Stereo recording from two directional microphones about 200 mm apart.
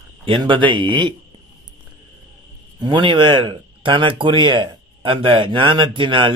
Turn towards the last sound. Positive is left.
turn(degrees=-25)  # may be behind; listen again after turning